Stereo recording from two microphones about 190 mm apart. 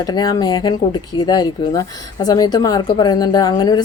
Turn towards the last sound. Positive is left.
turn(degrees=20)  # may be behind; listen again after turning